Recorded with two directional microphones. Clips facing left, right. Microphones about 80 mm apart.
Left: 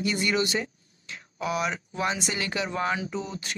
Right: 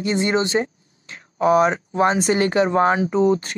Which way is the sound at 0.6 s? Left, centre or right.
Right.